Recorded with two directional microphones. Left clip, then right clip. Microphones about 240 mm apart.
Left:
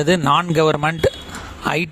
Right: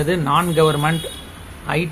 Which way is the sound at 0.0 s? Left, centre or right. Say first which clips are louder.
Left 2 dB; left.